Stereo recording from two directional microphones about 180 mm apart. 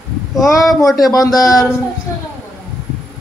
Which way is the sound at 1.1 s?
20° left (ahead or behind).